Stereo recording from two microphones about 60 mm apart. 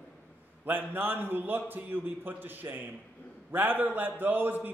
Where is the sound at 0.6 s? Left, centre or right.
Right.